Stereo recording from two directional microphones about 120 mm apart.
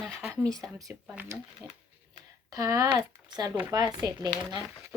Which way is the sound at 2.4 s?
30° right (ahead or behind).